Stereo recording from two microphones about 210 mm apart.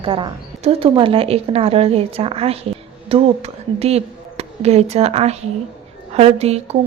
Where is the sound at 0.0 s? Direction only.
25° right (ahead or behind).